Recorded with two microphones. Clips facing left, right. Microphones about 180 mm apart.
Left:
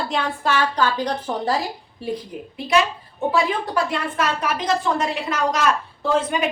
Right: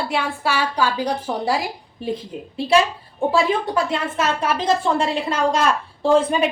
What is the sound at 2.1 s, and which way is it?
A woman's voice, 25° right (ahead or behind).